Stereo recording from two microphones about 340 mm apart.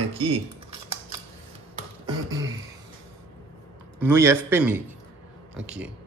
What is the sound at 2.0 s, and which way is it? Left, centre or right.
Beatboxing, centre.